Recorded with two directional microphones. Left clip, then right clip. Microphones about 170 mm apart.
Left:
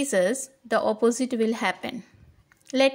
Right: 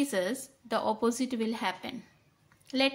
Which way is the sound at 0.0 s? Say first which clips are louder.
Left 8 dB; 35° left (ahead or behind).